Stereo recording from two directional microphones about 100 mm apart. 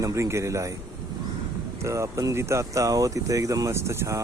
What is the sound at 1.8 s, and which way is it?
Speech, 30° right (ahead or behind).